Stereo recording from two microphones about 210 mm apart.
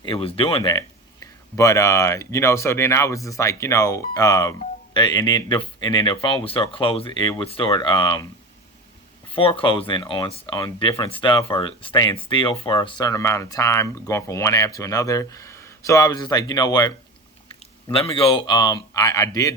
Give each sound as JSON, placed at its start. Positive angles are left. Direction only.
{"t": 0.0, "sound": "speech", "side_deg": 25}
{"t": 9.3, "sound": "speech", "side_deg": 25}